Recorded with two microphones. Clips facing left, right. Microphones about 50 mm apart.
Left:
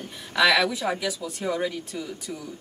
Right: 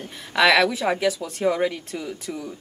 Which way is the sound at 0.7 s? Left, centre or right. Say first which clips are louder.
Right 5 dB; right.